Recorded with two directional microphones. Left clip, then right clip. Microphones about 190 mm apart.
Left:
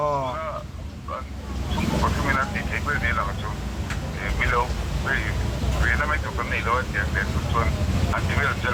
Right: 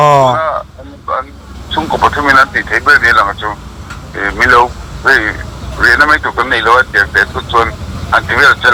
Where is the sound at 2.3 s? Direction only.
45° right (ahead or behind).